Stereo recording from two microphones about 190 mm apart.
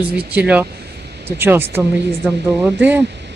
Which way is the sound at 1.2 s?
10° right (ahead or behind).